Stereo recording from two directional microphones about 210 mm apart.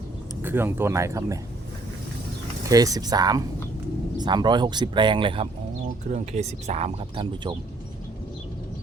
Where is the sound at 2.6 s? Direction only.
15° right (ahead or behind).